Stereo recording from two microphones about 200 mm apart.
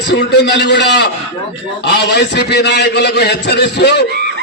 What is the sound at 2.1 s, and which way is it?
A man's voice, 55° left (ahead or behind).